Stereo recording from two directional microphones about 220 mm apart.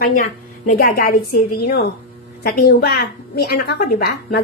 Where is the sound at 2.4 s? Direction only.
45° left (ahead or behind).